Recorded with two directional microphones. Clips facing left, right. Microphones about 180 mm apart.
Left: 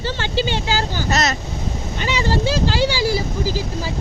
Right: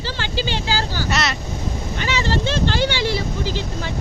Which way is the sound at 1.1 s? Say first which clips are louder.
Left 3 dB; 40° left (ahead or behind).